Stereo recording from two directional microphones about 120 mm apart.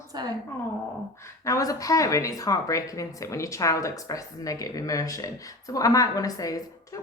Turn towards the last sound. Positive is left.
turn(degrees=30)  # may be behind; listen again after turning